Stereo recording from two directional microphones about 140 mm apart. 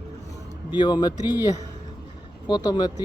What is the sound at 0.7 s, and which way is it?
A man's voice, 30° left (ahead or behind).